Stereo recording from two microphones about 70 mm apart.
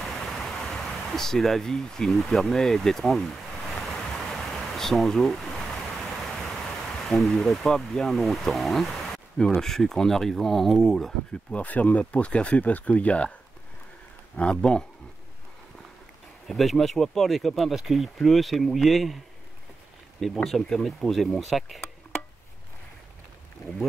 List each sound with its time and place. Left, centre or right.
0.0 s speech: centre
3.8 s a sound: centre
9.6 s speech: centre
11.5 s speech: left
14.3 s speech: centre
16.4 s speech: centre
20.4 s speech: centre